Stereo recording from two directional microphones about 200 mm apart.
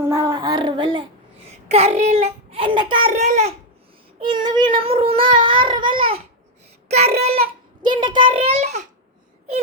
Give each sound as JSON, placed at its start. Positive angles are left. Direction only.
{"t": 0.0, "sound": "child singing", "side_deg": -15}
{"t": 1.6, "sound": "a child's voice", "side_deg": -30}
{"t": 4.2, "sound": "child singing", "side_deg": -25}
{"t": 6.9, "sound": "a child's voice", "side_deg": -30}
{"t": 7.9, "sound": "child singing", "side_deg": -25}